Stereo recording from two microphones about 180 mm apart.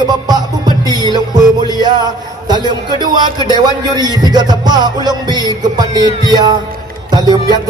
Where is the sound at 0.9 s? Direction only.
25° right (ahead or behind).